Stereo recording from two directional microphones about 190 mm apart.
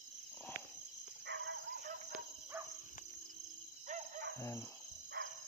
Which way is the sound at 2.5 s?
15° right (ahead or behind).